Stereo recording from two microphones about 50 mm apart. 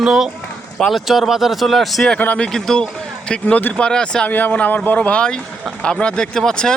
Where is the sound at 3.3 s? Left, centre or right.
Left.